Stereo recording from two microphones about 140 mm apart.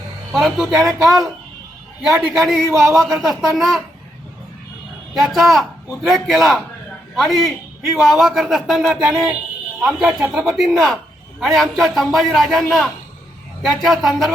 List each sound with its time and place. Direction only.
0.3 s a man's voice: centre (ahead or behind)
5.1 s a man's voice: centre (ahead or behind)
9.8 s a man's voice: 10° right (ahead or behind)